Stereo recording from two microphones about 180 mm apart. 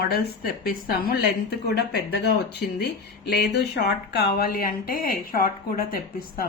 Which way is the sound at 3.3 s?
65° left (ahead or behind).